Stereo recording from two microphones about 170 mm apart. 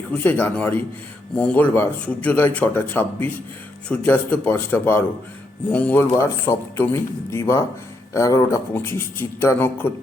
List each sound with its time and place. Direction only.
0.1 s speech: 10° left (ahead or behind)